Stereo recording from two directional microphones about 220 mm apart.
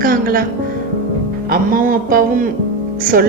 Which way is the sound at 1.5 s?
40° right (ahead or behind).